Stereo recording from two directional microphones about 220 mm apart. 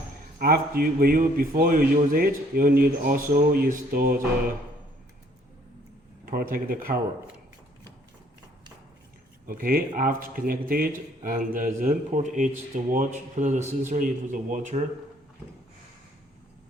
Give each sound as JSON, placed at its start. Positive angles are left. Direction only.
{"t": 0.3, "sound": "speech", "side_deg": -45}
{"t": 6.2, "sound": "speech", "side_deg": -40}
{"t": 9.5, "sound": "speech", "side_deg": -40}